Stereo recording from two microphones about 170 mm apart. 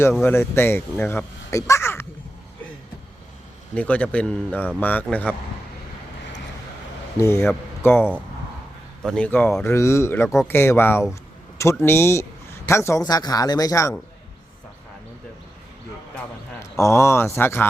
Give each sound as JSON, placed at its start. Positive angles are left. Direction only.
{"t": 0.3, "sound": "speech", "side_deg": 15}
{"t": 3.8, "sound": "speech", "side_deg": 10}
{"t": 7.2, "sound": "speech", "side_deg": 15}
{"t": 9.0, "sound": "a man's voice", "side_deg": 5}
{"t": 16.1, "sound": "a man's voice", "side_deg": 15}